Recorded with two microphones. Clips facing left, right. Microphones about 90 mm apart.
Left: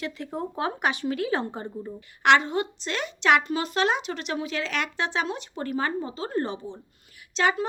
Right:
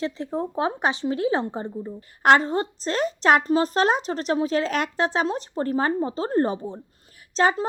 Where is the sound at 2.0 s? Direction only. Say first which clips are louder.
Right 3 dB; 40° right (ahead or behind).